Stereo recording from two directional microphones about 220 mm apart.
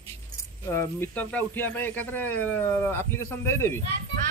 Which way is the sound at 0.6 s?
10° left (ahead or behind).